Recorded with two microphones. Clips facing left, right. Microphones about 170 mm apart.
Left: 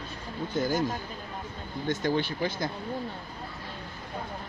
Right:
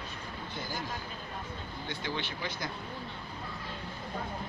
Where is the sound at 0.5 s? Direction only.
45° left (ahead or behind).